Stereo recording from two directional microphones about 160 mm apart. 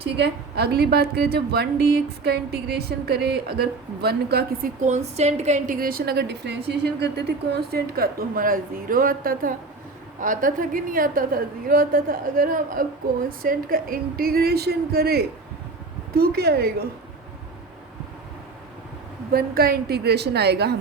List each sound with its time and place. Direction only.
0.2 s a woman's voice: 90° right
4.8 s a woman's voice: 45° right (ahead or behind); by 16.7 s 80° right
19.3 s a woman's voice: 70° right (ahead or behind); by 20.7 s 90° right